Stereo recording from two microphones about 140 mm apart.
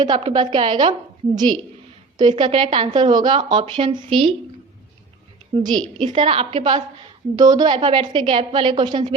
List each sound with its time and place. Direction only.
0.1 s speech: 40° right (ahead or behind)
5.6 s speech: 35° right (ahead or behind)
7.3 s speech: 25° right (ahead or behind)